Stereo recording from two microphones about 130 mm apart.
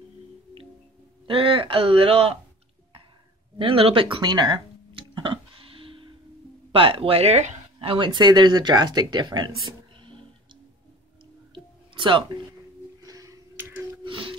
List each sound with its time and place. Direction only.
1.2 s speech: 40° right (ahead or behind)
3.5 s a sound: 45° right (ahead or behind)
6.7 s speech: 45° right (ahead or behind)
9.9 s music: 40° right (ahead or behind)
11.5 s music: 40° right (ahead or behind)
13.0 s a sound: 25° right (ahead or behind)
14.0 s music: 40° right (ahead or behind)